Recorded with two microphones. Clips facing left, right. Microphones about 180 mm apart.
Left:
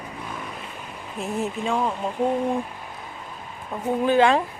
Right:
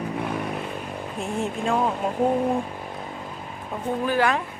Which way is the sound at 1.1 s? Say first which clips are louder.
Left 1 dB; centre (ahead or behind).